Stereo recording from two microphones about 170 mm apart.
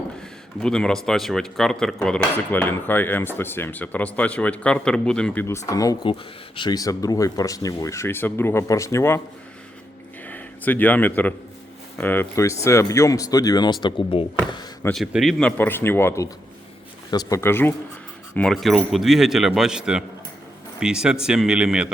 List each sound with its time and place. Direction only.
0.2 s speech: 5° left (ahead or behind)
10.2 s speech: 10° left (ahead or behind); by 14.3 s 30° left (ahead or behind)
14.8 s speech: centre (ahead or behind)
18.3 s speech: centre (ahead or behind)